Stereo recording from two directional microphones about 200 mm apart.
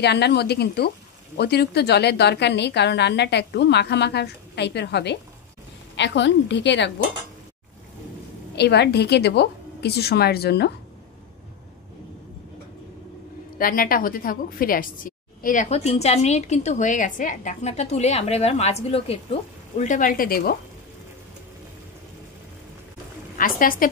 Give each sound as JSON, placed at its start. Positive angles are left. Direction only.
{"t": 0.0, "sound": "speech", "side_deg": 55}
{"t": 8.5, "sound": "speech", "side_deg": 55}
{"t": 13.6, "sound": "a woman's voice", "side_deg": 45}
{"t": 23.3, "sound": "a woman's voice", "side_deg": 45}